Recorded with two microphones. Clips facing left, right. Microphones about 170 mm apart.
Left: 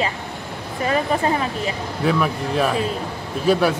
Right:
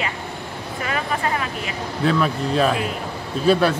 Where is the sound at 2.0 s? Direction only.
10° left (ahead or behind).